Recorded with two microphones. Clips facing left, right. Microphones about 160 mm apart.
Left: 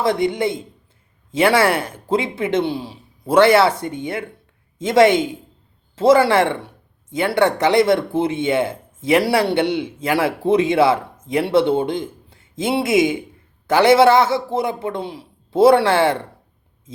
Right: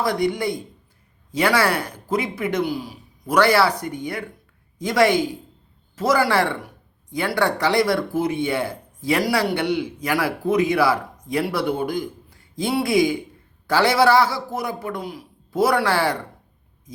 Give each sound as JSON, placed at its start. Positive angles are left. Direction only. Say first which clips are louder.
{"t": 0.0, "sound": "speech", "louder": "left 3 dB", "side_deg": 25}